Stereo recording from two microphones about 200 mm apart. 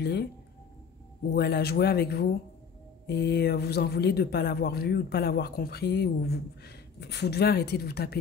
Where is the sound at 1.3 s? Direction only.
55° left (ahead or behind).